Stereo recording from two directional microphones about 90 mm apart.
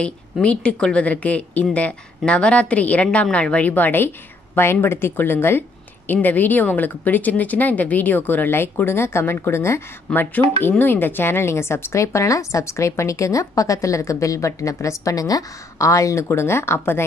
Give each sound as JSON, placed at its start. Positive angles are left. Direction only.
{"t": 0.0, "sound": "speech", "side_deg": 10}
{"t": 10.0, "sound": "a woman's voice", "side_deg": 20}